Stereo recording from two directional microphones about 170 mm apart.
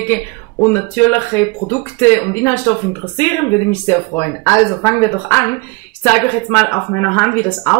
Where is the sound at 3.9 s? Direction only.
15° left (ahead or behind).